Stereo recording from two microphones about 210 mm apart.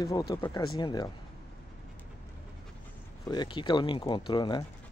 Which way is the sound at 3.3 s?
20° left (ahead or behind).